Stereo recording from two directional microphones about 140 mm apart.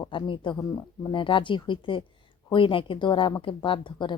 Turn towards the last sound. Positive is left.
turn(degrees=35)  # may be behind; listen again after turning